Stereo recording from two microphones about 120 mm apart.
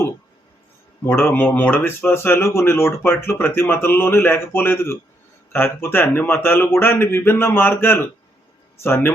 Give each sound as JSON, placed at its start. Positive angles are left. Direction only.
{"t": 1.0, "sound": "speech", "side_deg": 20}